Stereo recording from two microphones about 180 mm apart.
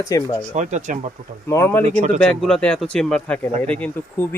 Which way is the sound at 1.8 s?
40° right (ahead or behind).